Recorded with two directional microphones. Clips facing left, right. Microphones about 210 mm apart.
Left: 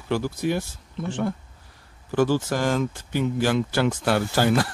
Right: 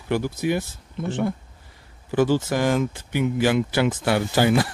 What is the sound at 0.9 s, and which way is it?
Speech, 20° right (ahead or behind).